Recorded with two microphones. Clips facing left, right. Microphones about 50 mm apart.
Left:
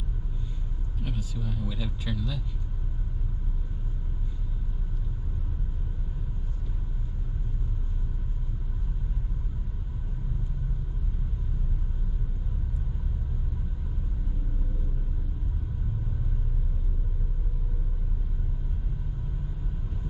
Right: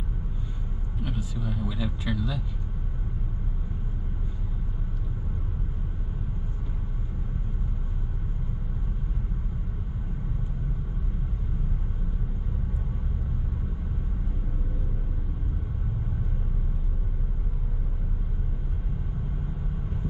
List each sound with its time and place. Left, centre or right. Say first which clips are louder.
1.0 s a man's voice: right 2 dB; centre